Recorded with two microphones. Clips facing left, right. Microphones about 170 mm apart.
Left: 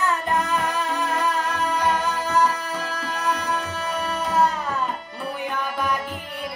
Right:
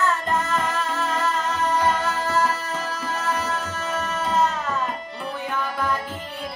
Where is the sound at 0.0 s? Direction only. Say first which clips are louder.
Even; 15° left (ahead or behind).